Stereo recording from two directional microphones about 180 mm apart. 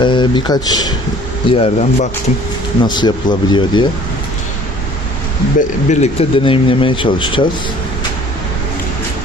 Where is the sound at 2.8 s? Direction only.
25° left (ahead or behind).